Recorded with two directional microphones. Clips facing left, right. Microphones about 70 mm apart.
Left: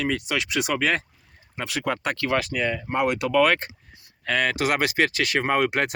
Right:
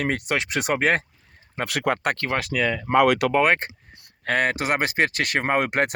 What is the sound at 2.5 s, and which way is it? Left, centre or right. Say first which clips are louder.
Speech: right 5 dB; right.